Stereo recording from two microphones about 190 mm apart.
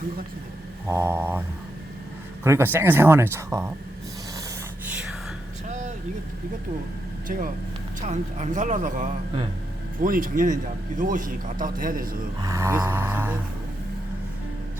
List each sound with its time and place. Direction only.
0.9 s speech: 15° right (ahead or behind)
5.6 s vehicle: 40° right (ahead or behind)
7.3 s a man's voice: 45° right (ahead or behind)
12.4 s speech: 15° right (ahead or behind)